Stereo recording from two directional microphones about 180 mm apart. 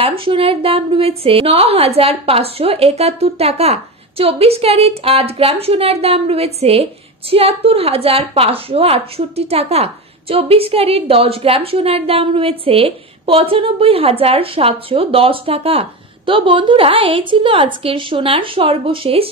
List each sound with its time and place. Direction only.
0.2 s a woman's voice: 30° right (ahead or behind)